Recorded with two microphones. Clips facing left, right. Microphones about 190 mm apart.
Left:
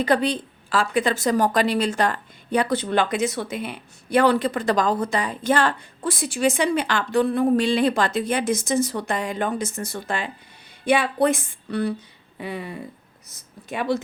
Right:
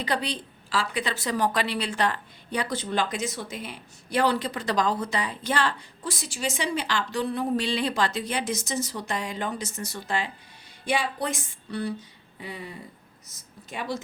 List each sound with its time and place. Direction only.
0.0 s a woman's voice: 50° left (ahead or behind)